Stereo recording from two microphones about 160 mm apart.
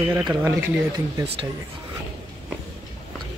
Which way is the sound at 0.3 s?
15° right (ahead or behind).